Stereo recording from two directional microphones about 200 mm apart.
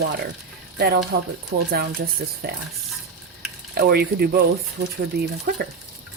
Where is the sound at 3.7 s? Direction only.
50° right (ahead or behind).